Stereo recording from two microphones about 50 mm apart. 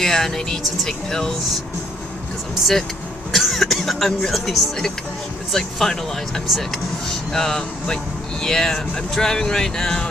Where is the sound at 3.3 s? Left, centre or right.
Centre.